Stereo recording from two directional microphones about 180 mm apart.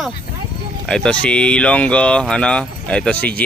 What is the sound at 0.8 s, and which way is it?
Speech, 5° left (ahead or behind).